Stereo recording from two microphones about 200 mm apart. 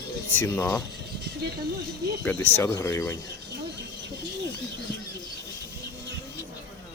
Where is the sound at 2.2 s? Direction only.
10° left (ahead or behind).